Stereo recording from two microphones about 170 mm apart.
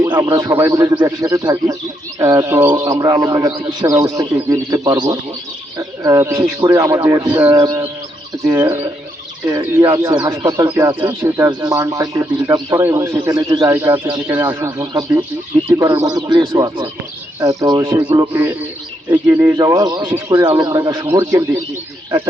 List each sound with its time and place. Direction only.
0.0 s speech: 20° right (ahead or behind)
5.7 s a sound: 20° right (ahead or behind)
6.6 s speech: 20° right (ahead or behind)